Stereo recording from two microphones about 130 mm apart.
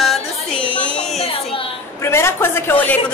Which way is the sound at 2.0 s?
20° left (ahead or behind).